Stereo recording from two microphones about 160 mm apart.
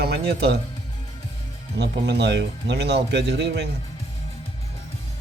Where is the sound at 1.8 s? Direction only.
90° right.